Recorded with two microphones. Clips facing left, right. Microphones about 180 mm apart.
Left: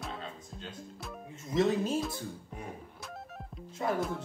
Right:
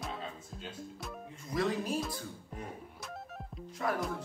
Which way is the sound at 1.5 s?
25° left (ahead or behind).